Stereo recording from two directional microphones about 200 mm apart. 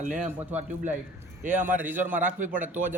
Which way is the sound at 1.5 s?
10° right (ahead or behind).